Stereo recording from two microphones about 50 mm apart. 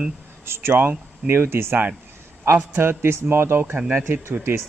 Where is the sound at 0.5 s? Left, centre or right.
Right.